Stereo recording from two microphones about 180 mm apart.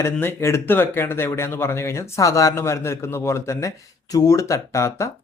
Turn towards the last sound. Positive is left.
turn(degrees=15)  # may be behind; listen again after turning